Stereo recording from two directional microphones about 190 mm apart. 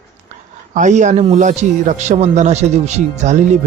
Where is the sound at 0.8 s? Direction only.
40° right (ahead or behind).